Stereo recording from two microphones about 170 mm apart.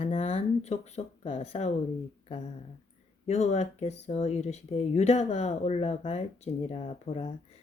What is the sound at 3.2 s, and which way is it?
Speech, 40° left (ahead or behind).